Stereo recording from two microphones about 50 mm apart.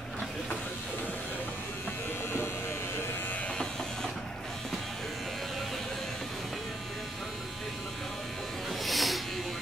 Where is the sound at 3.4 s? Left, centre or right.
Centre.